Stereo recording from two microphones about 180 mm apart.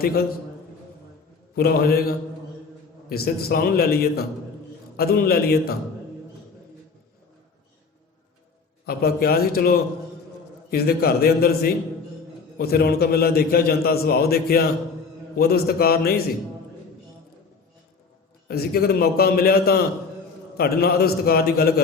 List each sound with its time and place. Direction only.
0.0 s a man's voice: 55° left (ahead or behind)
1.5 s a man's voice: 60° left (ahead or behind)
8.9 s a man's voice: 55° left (ahead or behind)
18.4 s a man's voice: 60° left (ahead or behind)